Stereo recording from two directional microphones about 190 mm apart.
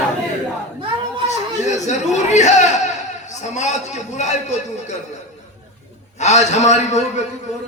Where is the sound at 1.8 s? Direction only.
40° left (ahead or behind).